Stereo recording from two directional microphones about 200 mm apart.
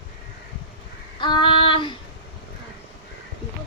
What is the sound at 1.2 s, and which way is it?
Child singing, 25° left (ahead or behind).